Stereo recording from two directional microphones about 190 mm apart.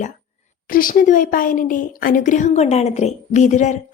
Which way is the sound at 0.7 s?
50° left (ahead or behind).